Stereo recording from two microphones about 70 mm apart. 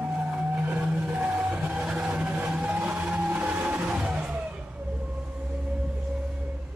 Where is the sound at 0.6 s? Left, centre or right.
Centre.